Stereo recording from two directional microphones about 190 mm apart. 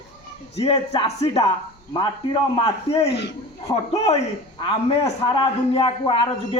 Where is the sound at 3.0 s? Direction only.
65° left (ahead or behind).